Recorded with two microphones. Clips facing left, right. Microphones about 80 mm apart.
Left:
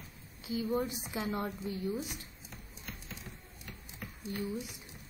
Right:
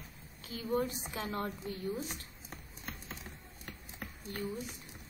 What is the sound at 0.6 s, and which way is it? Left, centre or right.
A woman's voice, centre.